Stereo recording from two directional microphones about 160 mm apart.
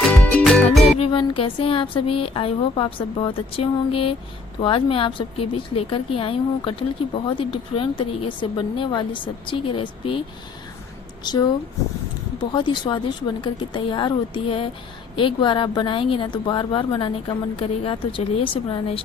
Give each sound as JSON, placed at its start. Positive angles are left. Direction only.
{"t": 0.1, "sound": "music", "side_deg": 10}
{"t": 0.9, "sound": "a woman's voice", "side_deg": 35}
{"t": 11.2, "sound": "speech", "side_deg": 25}
{"t": 12.5, "sound": "a woman's voice", "side_deg": 30}